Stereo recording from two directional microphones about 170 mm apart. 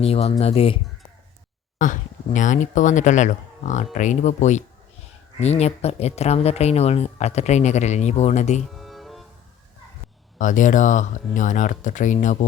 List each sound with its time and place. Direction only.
0.0 s speech: 35° left (ahead or behind)
1.8 s speech: 50° left (ahead or behind)
8.7 s music: centre (ahead or behind)
10.3 s speech: 50° left (ahead or behind)